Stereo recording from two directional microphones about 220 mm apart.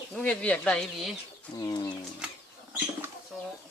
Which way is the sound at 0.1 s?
5° left (ahead or behind).